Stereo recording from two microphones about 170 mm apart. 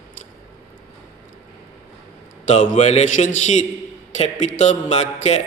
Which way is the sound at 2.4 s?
45° left (ahead or behind).